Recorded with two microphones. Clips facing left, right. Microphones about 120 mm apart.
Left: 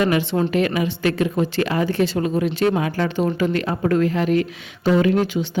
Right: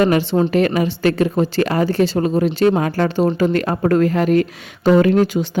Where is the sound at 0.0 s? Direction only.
40° right (ahead or behind).